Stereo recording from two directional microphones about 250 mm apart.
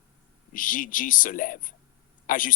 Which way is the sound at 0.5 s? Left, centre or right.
Left.